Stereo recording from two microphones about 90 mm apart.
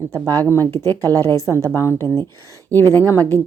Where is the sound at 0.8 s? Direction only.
30° left (ahead or behind).